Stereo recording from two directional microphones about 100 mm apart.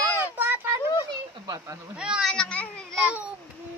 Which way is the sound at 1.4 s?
30° right (ahead or behind).